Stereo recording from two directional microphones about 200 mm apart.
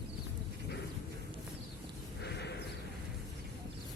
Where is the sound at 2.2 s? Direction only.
55° left (ahead or behind).